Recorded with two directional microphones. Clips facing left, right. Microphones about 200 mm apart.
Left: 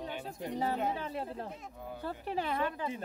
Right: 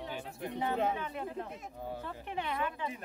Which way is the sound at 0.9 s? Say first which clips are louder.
Even; 35° left (ahead or behind).